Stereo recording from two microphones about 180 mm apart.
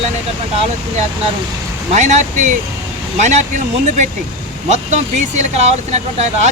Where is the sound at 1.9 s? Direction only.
40° right (ahead or behind).